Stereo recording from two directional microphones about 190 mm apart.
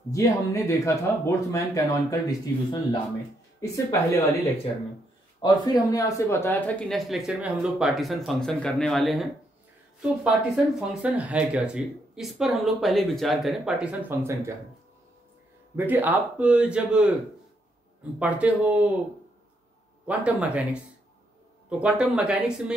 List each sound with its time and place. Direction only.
0.1 s speech: 15° left (ahead or behind)
5.4 s speech: 20° left (ahead or behind); by 14.5 s 15° right (ahead or behind)
15.7 s a man's voice: 10° right (ahead or behind)
18.2 s a man's voice: 10° right (ahead or behind)
20.1 s a man's voice: 5° right (ahead or behind)